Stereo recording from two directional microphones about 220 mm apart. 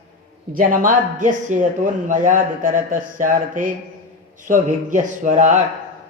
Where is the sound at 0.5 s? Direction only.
40° right (ahead or behind).